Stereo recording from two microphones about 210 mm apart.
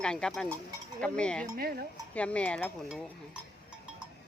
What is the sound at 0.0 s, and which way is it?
Speech, 5° left (ahead or behind).